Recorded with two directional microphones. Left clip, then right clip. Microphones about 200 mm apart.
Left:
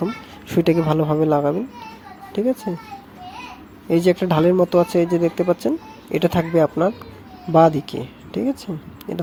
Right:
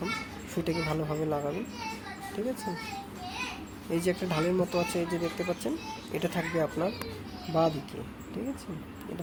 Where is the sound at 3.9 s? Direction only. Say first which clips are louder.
Left 13 dB; 40° left (ahead or behind).